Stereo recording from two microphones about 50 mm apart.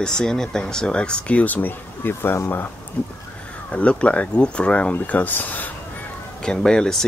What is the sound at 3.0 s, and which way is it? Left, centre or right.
Speech, left.